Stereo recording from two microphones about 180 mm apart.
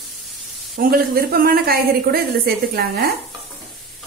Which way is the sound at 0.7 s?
55° right (ahead or behind).